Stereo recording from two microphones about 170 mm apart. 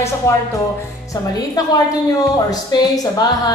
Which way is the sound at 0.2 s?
15° left (ahead or behind).